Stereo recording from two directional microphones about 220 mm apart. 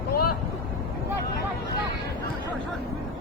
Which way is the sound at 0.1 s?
90° left.